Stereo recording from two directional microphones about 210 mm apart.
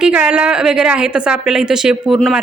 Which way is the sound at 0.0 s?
5° right (ahead or behind).